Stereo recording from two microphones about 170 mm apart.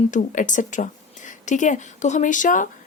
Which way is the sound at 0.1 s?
45° left (ahead or behind).